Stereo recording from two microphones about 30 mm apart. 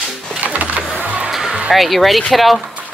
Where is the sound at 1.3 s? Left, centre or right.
Centre.